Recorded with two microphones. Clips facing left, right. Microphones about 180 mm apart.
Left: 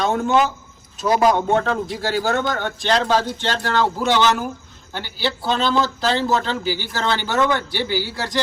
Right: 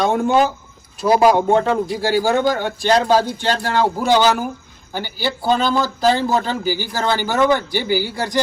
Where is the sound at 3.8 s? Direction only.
40° right (ahead or behind).